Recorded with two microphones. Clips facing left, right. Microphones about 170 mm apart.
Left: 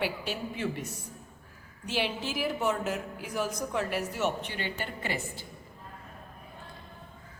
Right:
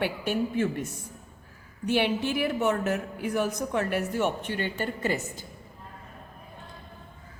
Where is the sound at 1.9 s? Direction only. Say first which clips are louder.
Right 6 dB; 60° right (ahead or behind).